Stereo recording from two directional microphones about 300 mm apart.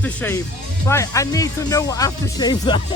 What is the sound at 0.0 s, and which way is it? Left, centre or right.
A man's voice, centre.